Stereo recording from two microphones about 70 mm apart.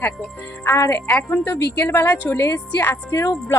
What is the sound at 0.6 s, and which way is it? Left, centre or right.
Speech, left.